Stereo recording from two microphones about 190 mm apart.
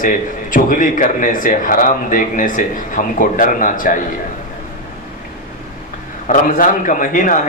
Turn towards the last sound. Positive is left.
turn(degrees=45)  # may be behind; listen again after turning